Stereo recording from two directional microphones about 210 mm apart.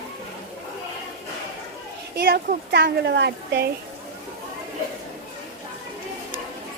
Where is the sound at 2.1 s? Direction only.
50° right (ahead or behind).